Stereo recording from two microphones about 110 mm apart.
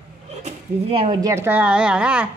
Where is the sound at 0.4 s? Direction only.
75° right (ahead or behind).